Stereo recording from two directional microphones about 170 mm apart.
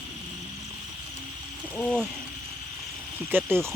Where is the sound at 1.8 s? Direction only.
5° left (ahead or behind).